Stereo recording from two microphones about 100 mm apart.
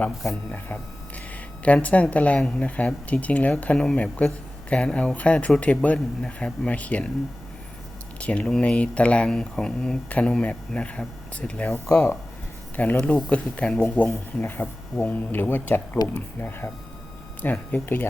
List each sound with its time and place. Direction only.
1.6 s speech: 15° left (ahead or behind)
8.2 s speech: 10° left (ahead or behind)